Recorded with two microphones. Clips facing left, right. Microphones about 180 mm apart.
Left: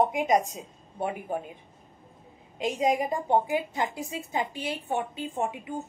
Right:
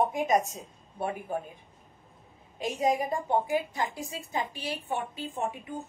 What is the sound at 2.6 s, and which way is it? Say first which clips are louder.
A woman's voice: left 2 dB; 20° left (ahead or behind).